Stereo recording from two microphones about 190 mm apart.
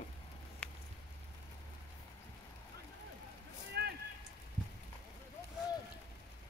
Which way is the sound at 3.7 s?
55° right (ahead or behind).